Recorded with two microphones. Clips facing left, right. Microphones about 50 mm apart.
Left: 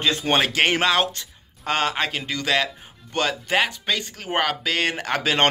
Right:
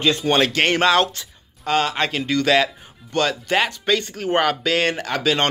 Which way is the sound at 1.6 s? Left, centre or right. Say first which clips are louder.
Right 3 dB; left.